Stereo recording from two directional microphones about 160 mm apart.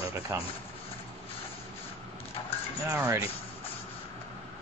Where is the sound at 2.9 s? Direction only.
10° right (ahead or behind).